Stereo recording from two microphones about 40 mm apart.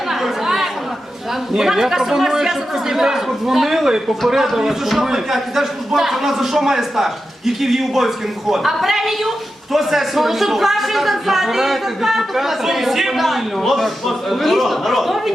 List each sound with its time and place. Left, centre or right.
0.1 s chatter: centre
1.5 s a man's voice: centre